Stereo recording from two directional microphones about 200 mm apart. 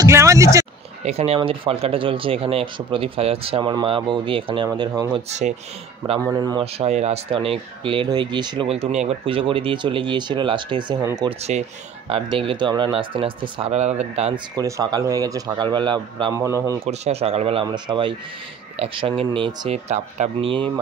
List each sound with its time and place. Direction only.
0.0 s speech: 15° right (ahead or behind)
1.0 s speech: 30° right (ahead or behind)
6.2 s a man's voice: 20° right (ahead or behind)
6.6 s speech: 30° right (ahead or behind)
14.5 s a man's voice: 20° right (ahead or behind)
16.8 s speech: 30° right (ahead or behind)